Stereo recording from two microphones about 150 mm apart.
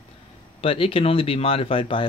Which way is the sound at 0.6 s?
40° left (ahead or behind).